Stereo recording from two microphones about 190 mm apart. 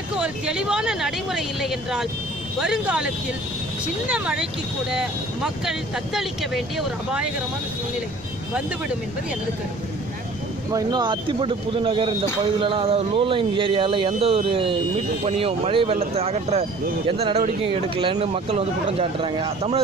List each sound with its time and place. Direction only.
0.2 s speech: 5° right (ahead or behind)
4.1 s speech: 5° right (ahead or behind)
10.7 s speech: 20° right (ahead or behind)
17.9 s speech: 25° right (ahead or behind)